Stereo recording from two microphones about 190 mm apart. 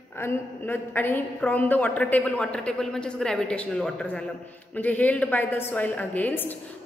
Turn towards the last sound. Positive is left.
turn(degrees=10)  # may be behind; listen again after turning